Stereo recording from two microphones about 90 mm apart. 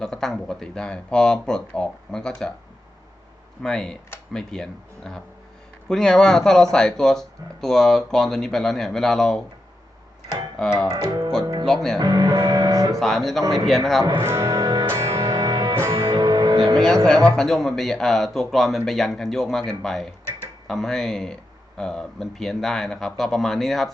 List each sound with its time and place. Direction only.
0.0 s speech: 5° left (ahead or behind)
3.6 s speech: 5° left (ahead or behind)
10.6 s speech: 5° left (ahead or behind)
11.9 s speech: 50° right (ahead or behind)
13.0 s speech: 5° left (ahead or behind)
14.2 s speech: 30° right (ahead or behind)
14.8 s music: 30° right (ahead or behind); by 15.7 s 45° right (ahead or behind)
15.9 s music: 90° right
16.1 s music: 50° right (ahead or behind)
16.7 s speech: 5° left (ahead or behind)